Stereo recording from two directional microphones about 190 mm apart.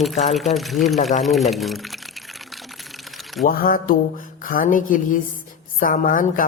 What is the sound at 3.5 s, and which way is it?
A woman's voice, 50° left (ahead or behind).